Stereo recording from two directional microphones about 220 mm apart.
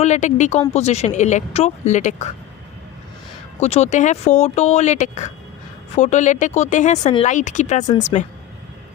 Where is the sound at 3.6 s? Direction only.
30° left (ahead or behind).